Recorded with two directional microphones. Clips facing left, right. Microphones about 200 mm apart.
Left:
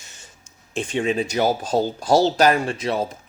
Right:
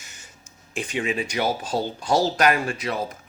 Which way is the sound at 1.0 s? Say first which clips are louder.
Left 5 dB; 40° left (ahead or behind).